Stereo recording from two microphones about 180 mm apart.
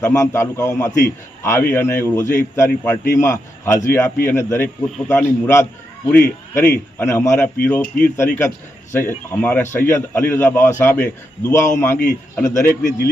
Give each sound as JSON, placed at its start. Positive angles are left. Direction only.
{"t": 0.0, "sound": "a man's voice", "side_deg": 15}